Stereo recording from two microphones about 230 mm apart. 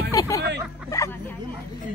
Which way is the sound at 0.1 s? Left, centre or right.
Centre.